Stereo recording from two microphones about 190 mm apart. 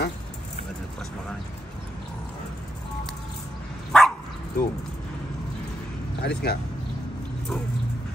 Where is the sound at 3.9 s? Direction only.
Centre (ahead or behind).